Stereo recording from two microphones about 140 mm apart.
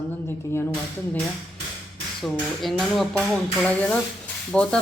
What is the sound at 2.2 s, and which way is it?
A woman's voice, centre (ahead or behind).